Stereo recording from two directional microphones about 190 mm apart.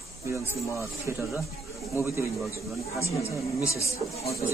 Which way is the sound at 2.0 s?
15° right (ahead or behind).